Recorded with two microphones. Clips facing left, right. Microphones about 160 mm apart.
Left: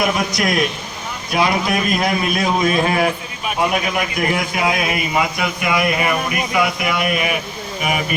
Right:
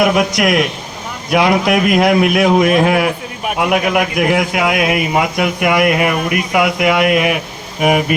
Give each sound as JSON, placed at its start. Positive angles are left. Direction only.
{"t": 0.0, "sound": "a man's voice", "side_deg": -80}